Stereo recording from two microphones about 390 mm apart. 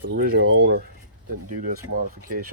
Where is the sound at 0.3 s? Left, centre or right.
Right.